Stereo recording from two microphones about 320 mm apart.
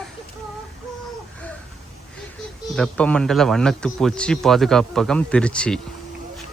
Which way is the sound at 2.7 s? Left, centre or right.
Centre.